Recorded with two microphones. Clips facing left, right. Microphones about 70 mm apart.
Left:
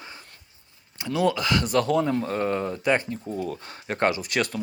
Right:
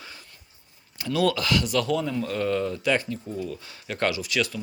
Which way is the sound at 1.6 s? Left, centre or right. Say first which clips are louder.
Left 3 dB; left.